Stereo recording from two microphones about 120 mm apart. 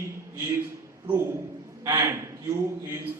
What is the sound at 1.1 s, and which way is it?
A man's voice, 20° right (ahead or behind).